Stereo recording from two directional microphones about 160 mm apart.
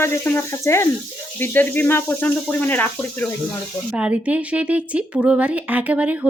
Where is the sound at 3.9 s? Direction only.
10° right (ahead or behind).